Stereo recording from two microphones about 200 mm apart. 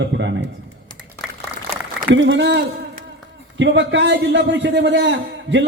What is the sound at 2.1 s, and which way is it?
A man's voice, 60° right (ahead or behind).